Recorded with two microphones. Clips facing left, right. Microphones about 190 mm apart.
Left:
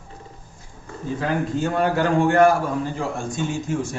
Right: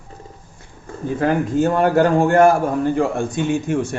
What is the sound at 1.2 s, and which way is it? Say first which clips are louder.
A man's voice: right 6 dB; 50° right (ahead or behind).